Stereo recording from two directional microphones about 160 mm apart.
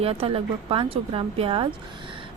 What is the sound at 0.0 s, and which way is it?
Speech, 35° right (ahead or behind).